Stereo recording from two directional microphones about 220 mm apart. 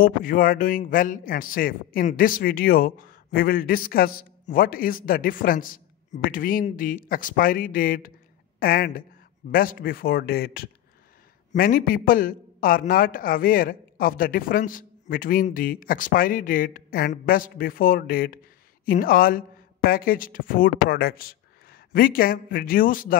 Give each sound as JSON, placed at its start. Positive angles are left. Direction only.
{"t": 0.0, "sound": "speech", "side_deg": 40}